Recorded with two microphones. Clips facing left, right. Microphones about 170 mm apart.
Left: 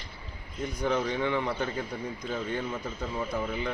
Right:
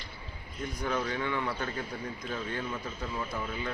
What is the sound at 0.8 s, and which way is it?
Speech, 20° left (ahead or behind).